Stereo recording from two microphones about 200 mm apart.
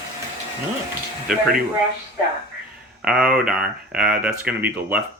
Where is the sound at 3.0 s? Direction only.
5° right (ahead or behind).